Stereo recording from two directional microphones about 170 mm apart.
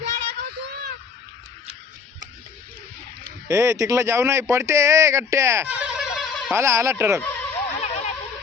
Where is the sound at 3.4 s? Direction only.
15° right (ahead or behind).